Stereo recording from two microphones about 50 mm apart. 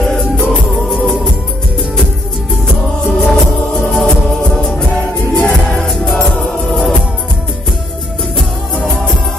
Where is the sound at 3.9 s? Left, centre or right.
Centre.